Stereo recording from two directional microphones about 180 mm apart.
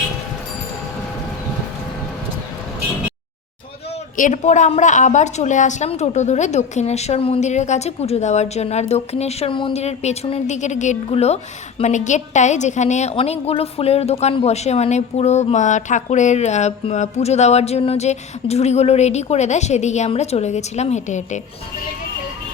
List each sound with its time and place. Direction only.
4.2 s a woman's voice: 45° left (ahead or behind)